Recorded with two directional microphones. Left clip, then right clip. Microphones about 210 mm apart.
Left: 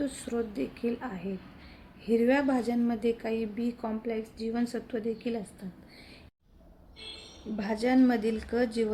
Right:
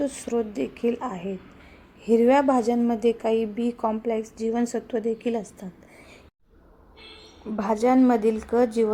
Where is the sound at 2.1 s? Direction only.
5° right (ahead or behind).